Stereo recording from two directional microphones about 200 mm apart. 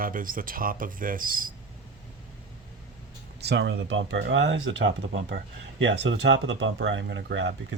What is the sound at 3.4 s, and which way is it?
Speech, 55° right (ahead or behind).